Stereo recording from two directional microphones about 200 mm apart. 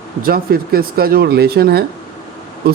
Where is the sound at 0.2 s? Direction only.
45° right (ahead or behind).